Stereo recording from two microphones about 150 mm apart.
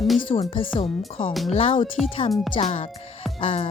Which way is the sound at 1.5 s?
40° left (ahead or behind).